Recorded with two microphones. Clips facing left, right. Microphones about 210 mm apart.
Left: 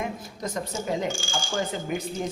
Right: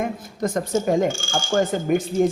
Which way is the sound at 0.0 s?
50° right (ahead or behind).